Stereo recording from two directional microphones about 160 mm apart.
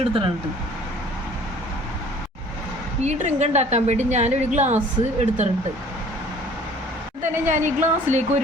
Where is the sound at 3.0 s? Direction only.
45° right (ahead or behind).